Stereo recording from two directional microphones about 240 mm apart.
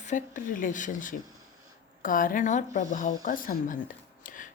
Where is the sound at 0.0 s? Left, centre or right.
Left.